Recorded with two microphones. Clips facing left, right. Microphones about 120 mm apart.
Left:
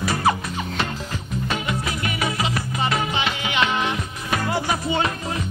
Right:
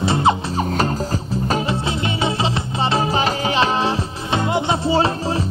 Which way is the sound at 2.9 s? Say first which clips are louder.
Right 8 dB; 35° right (ahead or behind).